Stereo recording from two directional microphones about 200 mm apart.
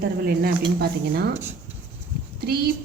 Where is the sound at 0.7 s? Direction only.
50° right (ahead or behind).